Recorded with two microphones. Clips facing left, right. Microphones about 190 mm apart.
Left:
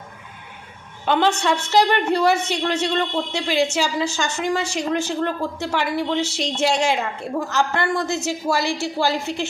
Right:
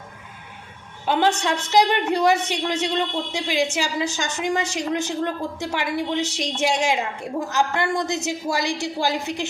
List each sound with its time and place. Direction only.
1.0 s a man's voice: 10° right (ahead or behind)